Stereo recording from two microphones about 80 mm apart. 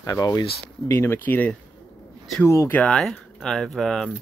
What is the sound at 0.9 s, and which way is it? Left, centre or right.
Speech, left.